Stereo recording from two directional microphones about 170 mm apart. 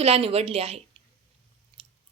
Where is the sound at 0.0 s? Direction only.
35° right (ahead or behind).